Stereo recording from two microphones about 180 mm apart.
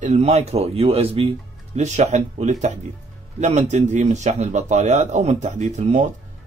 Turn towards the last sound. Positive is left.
turn(degrees=-40)  # may be behind; listen again after turning